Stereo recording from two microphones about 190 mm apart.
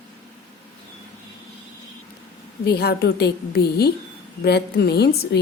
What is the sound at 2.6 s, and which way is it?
A woman's voice, 55° left (ahead or behind).